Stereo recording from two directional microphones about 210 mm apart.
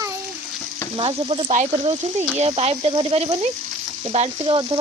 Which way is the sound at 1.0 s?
25° right (ahead or behind).